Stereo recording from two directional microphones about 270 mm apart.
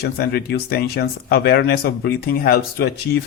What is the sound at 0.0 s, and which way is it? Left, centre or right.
Speech, left.